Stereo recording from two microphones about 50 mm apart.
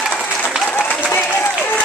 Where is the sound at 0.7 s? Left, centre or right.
Left.